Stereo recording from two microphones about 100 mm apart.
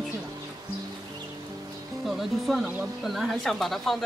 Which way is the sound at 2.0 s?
Centre (ahead or behind).